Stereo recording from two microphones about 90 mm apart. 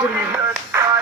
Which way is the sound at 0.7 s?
30° right (ahead or behind).